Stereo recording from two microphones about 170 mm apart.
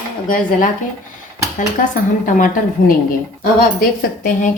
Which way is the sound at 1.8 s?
50° left (ahead or behind).